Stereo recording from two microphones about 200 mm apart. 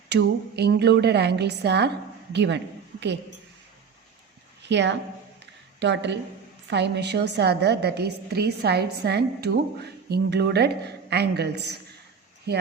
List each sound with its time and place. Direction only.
0.1 s a woman's voice: 55° right (ahead or behind)
4.6 s a woman's voice: 60° right (ahead or behind)